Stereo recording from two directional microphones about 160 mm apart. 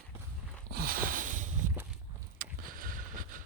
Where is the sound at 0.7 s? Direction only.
65° right (ahead or behind).